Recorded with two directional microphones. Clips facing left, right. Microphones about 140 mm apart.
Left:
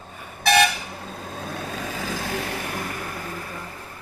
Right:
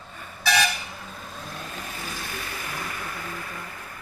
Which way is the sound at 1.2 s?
70° left (ahead or behind).